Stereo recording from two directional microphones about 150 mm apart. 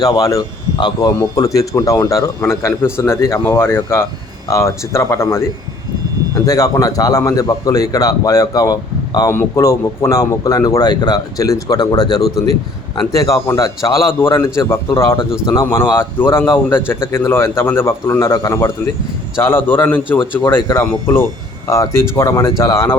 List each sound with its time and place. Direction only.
0.0 s a man's voice: 25° left (ahead or behind)
21.7 s a man's voice: 20° left (ahead or behind)